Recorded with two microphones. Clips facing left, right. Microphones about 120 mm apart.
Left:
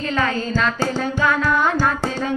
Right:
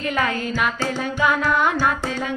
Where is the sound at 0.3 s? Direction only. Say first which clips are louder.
Left 2 dB; 30° left (ahead or behind).